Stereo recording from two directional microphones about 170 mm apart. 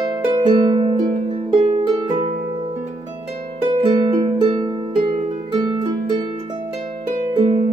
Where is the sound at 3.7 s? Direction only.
30° right (ahead or behind).